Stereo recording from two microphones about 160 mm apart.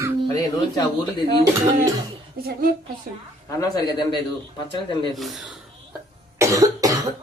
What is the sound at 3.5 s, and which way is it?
Speech, 25° left (ahead or behind).